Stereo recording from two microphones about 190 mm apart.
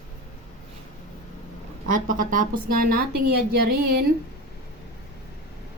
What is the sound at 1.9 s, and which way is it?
Speech, 45° right (ahead or behind).